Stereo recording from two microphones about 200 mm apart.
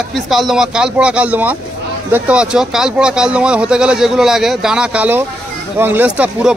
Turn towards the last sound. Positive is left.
turn(degrees=-5)  # may be behind; listen again after turning